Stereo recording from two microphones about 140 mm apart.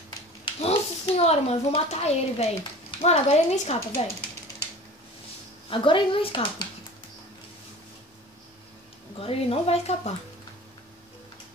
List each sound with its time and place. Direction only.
0.6 s a woman's voice: 45° left (ahead or behind)
5.7 s speech: 35° left (ahead or behind)
9.2 s a woman's voice: 45° left (ahead or behind)